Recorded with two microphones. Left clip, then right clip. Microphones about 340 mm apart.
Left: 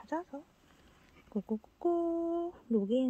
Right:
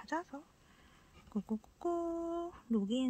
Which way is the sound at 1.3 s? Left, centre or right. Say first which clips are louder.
Left 4 dB; centre.